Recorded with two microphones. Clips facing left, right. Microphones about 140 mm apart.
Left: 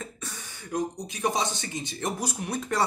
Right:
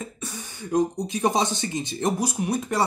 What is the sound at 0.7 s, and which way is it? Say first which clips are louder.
Speech: right 7 dB; 30° right (ahead or behind).